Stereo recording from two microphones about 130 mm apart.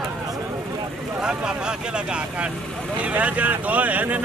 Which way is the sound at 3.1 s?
10° right (ahead or behind).